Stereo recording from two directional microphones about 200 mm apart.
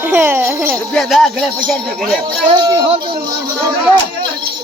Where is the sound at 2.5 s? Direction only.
20° right (ahead or behind).